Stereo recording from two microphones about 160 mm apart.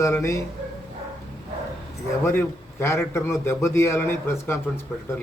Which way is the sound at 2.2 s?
15° left (ahead or behind).